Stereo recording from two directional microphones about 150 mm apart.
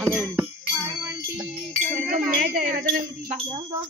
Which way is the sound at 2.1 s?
65° right (ahead or behind).